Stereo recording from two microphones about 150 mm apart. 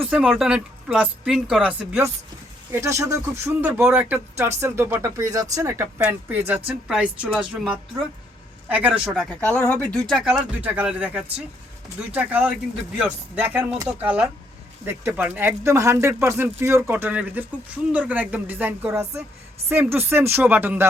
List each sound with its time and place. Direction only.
0.0 s speech: 5° right (ahead or behind)
1.9 s speech: 15° right (ahead or behind)
8.7 s speech: 10° right (ahead or behind)
9.3 s speech: 10° left (ahead or behind); by 20.8 s 15° right (ahead or behind)